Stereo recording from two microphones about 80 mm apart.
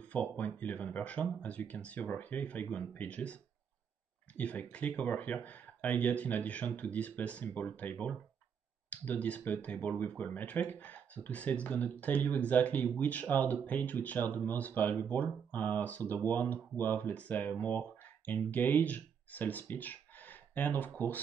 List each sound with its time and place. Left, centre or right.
0.0 s speech: centre
4.4 s speech: centre